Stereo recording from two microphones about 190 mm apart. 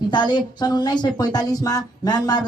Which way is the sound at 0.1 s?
20° left (ahead or behind).